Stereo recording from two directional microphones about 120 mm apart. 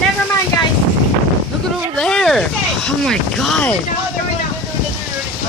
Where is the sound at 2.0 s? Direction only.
5° left (ahead or behind).